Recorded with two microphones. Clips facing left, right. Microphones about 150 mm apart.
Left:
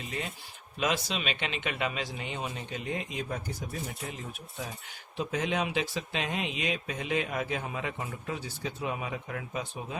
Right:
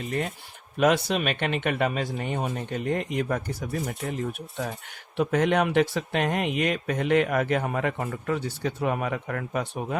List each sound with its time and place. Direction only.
0.0 s speech: 55° right (ahead or behind)